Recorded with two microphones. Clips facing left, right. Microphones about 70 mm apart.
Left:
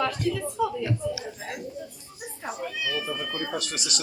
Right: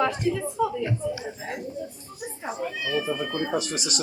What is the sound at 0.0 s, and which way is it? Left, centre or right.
Speech, right.